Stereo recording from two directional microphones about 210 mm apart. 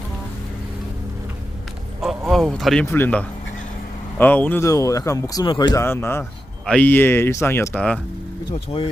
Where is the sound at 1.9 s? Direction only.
Centre (ahead or behind).